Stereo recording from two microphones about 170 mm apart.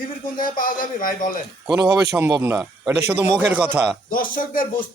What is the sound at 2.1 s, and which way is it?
A man's voice, 15° right (ahead or behind).